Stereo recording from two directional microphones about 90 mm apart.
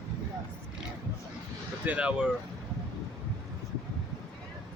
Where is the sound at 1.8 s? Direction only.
15° right (ahead or behind).